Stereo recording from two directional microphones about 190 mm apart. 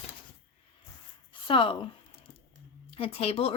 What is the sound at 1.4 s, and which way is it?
Speech, 25° left (ahead or behind).